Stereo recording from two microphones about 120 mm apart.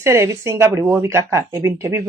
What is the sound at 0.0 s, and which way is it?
Speech, 25° right (ahead or behind).